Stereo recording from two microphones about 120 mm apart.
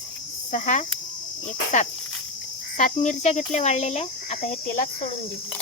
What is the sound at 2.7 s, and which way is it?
Speech, 90° left.